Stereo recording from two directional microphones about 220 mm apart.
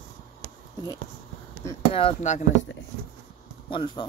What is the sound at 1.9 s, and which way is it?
Speech, 25° left (ahead or behind).